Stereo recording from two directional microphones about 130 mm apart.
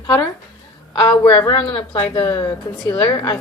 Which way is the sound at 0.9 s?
30° left (ahead or behind).